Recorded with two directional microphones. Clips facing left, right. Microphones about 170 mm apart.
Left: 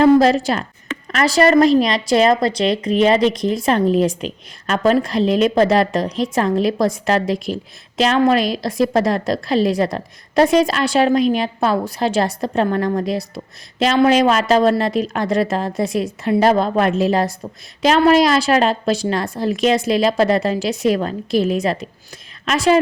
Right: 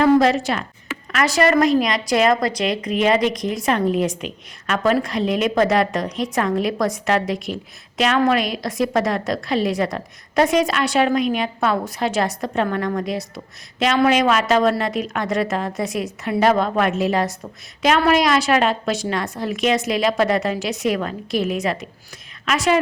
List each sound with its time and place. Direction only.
0.0 s a woman's voice: 35° left (ahead or behind)